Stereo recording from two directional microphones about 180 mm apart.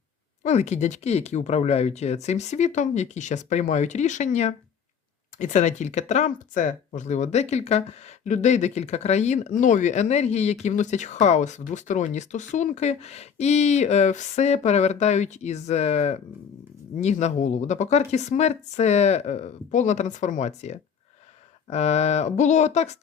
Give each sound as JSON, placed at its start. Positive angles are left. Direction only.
{"t": 0.4, "sound": "speech", "side_deg": 40}